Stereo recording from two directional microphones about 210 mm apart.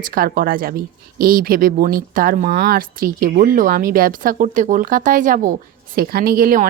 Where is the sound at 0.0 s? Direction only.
45° right (ahead or behind).